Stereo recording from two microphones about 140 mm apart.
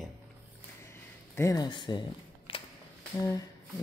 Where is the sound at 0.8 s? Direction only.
20° left (ahead or behind); by 2.6 s 35° left (ahead or behind).